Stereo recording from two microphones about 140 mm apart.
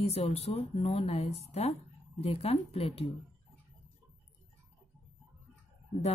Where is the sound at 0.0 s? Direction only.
45° left (ahead or behind).